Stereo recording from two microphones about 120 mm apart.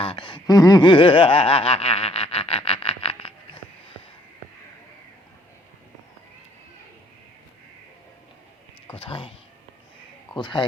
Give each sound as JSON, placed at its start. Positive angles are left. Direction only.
{"t": 0.0, "sound": "speech", "side_deg": 45}
{"t": 9.0, "sound": "speech", "side_deg": 50}
{"t": 10.3, "sound": "speech", "side_deg": 40}